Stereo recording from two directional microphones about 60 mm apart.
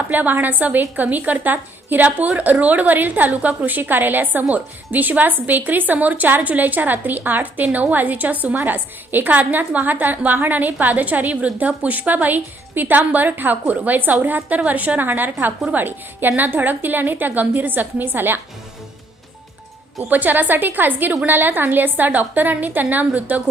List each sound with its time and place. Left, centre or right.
0.1 s a woman's voice: right
20.1 s a woman's voice: right